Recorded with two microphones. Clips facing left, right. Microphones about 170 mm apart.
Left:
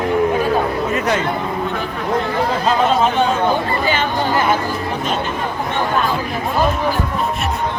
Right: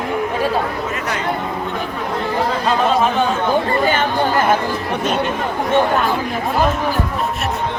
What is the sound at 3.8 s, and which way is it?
Chatter, 50° right (ahead or behind).